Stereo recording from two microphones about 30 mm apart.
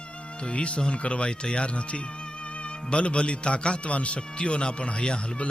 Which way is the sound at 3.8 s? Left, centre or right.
Left.